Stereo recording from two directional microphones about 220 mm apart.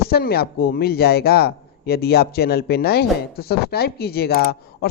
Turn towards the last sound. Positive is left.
turn(degrees=45)  # may be behind; listen again after turning